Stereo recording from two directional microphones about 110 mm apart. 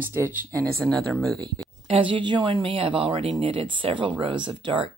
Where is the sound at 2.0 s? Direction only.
50° right (ahead or behind).